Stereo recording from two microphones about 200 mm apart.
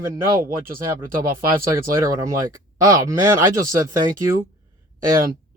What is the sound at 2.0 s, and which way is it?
Speech, 15° right (ahead or behind).